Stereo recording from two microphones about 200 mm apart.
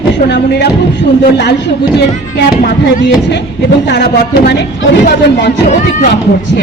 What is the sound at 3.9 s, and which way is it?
Speech, 60° left (ahead or behind).